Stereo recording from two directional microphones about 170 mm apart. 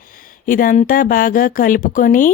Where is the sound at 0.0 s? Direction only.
55° left (ahead or behind).